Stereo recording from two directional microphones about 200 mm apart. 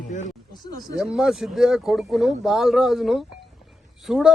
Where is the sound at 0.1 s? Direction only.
40° left (ahead or behind).